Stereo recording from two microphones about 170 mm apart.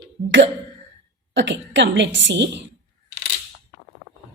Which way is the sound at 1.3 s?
90° right.